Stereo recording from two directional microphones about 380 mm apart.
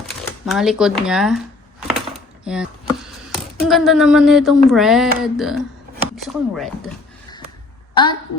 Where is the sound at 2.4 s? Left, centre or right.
Centre.